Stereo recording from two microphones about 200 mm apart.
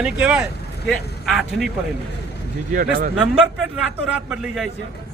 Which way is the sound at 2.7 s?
45° right (ahead or behind).